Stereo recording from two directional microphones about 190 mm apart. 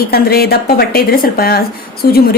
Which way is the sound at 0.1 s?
55° left (ahead or behind).